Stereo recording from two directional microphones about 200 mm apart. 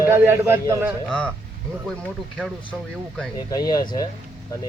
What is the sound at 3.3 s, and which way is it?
Speech, 20° left (ahead or behind).